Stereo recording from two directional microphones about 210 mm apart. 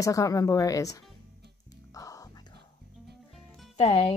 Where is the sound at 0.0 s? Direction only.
15° left (ahead or behind).